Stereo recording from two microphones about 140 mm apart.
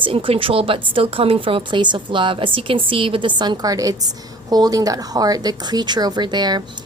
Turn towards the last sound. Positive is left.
turn(degrees=-30)  # may be behind; listen again after turning